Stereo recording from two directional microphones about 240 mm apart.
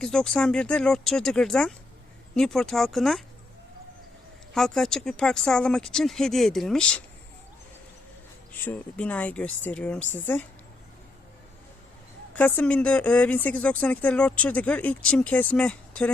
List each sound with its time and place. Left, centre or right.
0.0 s speech: centre
4.5 s speech: centre
8.6 s a woman's voice: centre
12.3 s speech: centre